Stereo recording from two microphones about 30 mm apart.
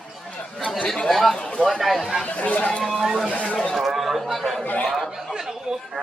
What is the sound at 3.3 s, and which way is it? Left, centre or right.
Speech, left.